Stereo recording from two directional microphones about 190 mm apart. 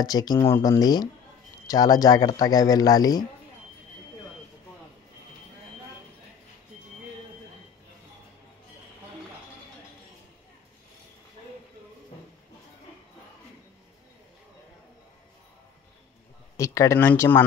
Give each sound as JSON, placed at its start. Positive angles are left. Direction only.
{"t": 0.0, "sound": "speech", "side_deg": 20}
{"t": 16.5, "sound": "speech", "side_deg": 15}